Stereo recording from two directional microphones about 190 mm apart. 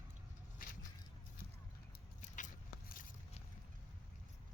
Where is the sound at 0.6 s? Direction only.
45° left (ahead or behind).